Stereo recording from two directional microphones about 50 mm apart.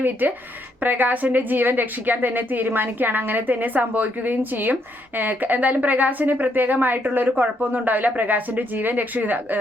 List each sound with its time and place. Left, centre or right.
0.0 s a woman's voice: right